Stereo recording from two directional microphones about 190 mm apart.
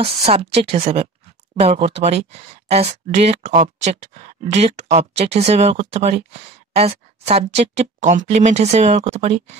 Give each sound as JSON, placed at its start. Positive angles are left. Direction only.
{"t": 0.0, "sound": "speech", "side_deg": -30}